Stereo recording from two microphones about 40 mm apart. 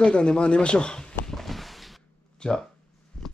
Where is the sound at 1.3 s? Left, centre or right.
Centre.